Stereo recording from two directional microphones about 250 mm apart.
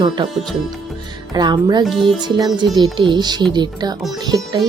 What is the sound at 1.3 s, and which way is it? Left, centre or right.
Speech, centre.